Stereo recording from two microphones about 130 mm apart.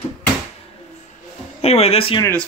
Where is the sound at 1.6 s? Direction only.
50° left (ahead or behind).